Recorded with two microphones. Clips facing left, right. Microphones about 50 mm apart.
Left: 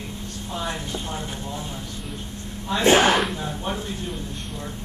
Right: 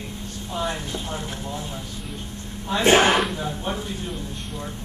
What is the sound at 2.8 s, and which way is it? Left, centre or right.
Speech, right.